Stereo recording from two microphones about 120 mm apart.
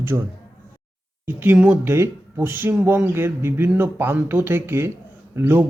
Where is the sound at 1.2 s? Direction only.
15° right (ahead or behind).